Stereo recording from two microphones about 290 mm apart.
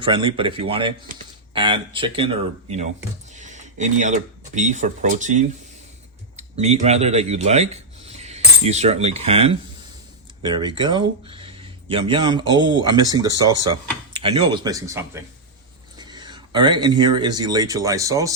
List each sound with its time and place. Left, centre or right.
0.0 s speech: centre